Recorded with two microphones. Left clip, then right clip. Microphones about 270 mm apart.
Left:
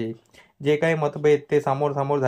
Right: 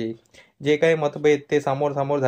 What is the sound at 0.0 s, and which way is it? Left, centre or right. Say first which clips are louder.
Speech: right 1 dB; centre.